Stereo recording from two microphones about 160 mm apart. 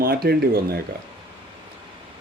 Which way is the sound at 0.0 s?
70° right (ahead or behind).